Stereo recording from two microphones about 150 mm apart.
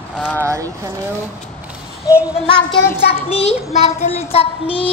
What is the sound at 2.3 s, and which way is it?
Child singing, 35° left (ahead or behind).